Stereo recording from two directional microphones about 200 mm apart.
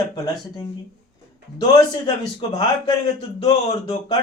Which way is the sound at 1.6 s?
20° left (ahead or behind).